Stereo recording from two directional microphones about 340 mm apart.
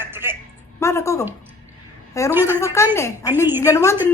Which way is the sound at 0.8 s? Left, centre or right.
Centre.